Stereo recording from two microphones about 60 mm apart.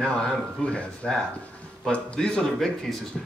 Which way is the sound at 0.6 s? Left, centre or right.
Centre.